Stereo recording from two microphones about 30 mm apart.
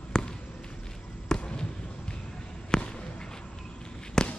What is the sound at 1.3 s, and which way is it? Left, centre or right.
Basketball bounce, left.